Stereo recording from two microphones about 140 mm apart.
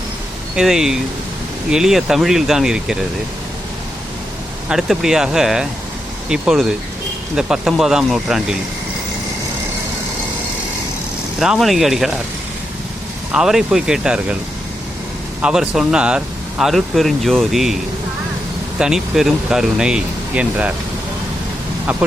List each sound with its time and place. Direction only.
0.5 s speech: 5° right (ahead or behind)
4.7 s speech: centre (ahead or behind)
11.3 s speech: 5° right (ahead or behind)
13.3 s speech: 5° right (ahead or behind)
15.4 s speech: 5° right (ahead or behind)
18.8 s speech: 5° right (ahead or behind)